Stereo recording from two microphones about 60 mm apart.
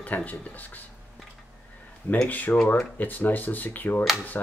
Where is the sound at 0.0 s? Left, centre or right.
Left.